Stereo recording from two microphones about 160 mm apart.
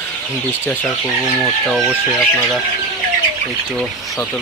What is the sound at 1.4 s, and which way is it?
Speech, centre (ahead or behind).